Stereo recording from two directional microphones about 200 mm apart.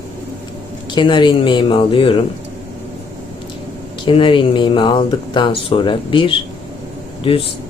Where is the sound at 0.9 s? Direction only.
25° left (ahead or behind).